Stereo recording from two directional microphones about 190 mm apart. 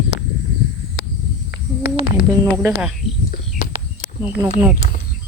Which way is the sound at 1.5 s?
75° left (ahead or behind).